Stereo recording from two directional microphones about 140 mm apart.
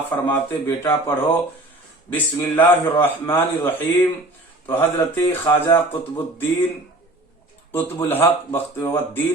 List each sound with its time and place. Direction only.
0.1 s speech: 15° left (ahead or behind)
4.7 s speech: 15° left (ahead or behind)
7.7 s speech: 15° left (ahead or behind)